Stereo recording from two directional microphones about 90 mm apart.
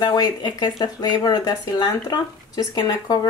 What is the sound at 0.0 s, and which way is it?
Speech, 50° left (ahead or behind).